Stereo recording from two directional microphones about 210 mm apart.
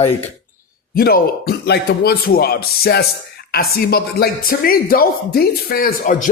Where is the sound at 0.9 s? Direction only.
45° left (ahead or behind).